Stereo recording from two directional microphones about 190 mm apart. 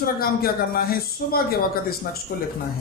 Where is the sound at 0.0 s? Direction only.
50° left (ahead or behind).